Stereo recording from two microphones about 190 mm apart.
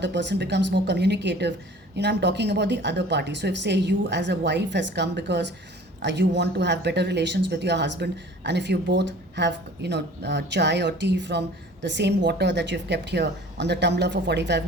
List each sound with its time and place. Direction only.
0.0 s speech: 65° right (ahead or behind)